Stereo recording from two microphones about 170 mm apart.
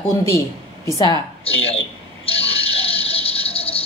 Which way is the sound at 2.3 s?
35° left (ahead or behind).